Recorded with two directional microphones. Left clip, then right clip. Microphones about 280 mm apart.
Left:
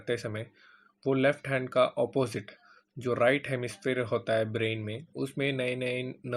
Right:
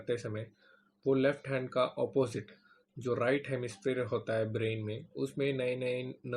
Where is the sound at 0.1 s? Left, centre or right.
Left.